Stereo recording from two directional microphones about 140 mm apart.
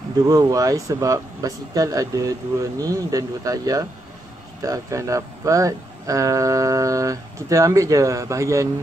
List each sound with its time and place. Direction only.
0.3 s speech: 25° right (ahead or behind)